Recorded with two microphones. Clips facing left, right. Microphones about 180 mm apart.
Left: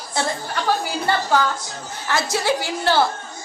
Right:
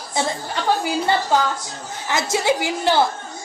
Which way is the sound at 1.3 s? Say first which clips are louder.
Even; 20° right (ahead or behind).